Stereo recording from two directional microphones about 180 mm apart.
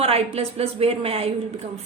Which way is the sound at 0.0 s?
35° right (ahead or behind).